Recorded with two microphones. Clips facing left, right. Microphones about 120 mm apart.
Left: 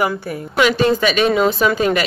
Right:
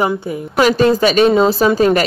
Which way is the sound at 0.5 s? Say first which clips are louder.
Right 3 dB; 40° right (ahead or behind).